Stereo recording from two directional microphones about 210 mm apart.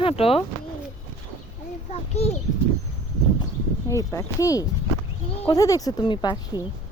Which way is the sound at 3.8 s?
15° left (ahead or behind).